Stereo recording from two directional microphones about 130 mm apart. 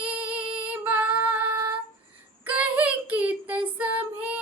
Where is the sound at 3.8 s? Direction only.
10° right (ahead or behind).